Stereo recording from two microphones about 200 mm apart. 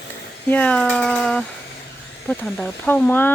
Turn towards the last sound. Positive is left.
turn(degrees=10)  # may be behind; listen again after turning